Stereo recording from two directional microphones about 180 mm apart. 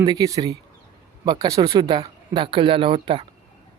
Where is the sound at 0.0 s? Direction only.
20° right (ahead or behind).